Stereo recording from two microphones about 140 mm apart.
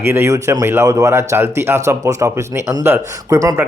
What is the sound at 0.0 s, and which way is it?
Speech, 15° right (ahead or behind).